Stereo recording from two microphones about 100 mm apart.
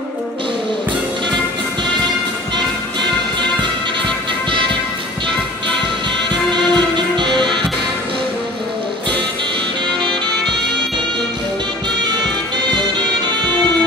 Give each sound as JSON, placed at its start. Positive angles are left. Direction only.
{"t": 6.5, "sound": "music", "side_deg": -50}